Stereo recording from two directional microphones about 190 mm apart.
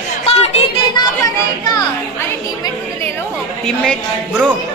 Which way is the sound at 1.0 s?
20° left (ahead or behind).